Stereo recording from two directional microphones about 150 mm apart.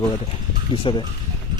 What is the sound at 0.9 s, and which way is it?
Speech, 35° left (ahead or behind).